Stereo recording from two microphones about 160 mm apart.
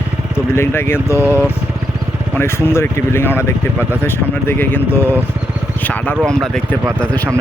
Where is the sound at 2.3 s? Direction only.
15° left (ahead or behind).